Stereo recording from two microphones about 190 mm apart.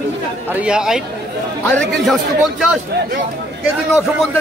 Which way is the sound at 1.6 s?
5° left (ahead or behind).